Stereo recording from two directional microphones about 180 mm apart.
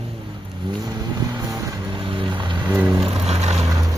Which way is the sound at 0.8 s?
20° right (ahead or behind).